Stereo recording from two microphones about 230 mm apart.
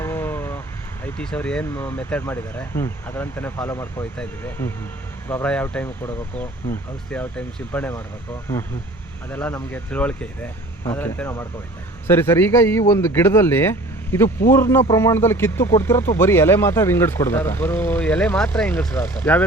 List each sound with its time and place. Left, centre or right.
0.0 s vehicle: centre
1.0 s speech: centre
9.3 s speech: centre